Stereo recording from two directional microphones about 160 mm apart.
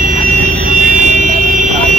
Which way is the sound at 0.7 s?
50° right (ahead or behind).